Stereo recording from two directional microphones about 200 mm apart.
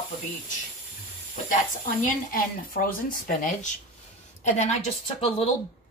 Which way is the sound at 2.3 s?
45° left (ahead or behind).